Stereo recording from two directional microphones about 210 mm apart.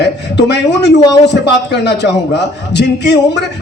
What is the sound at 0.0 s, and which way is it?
A man's voice, 55° left (ahead or behind).